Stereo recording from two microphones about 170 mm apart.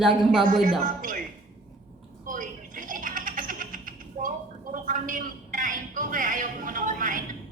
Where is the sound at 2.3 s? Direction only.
50° right (ahead or behind).